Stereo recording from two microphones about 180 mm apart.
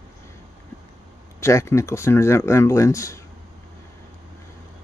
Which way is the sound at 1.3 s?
15° left (ahead or behind).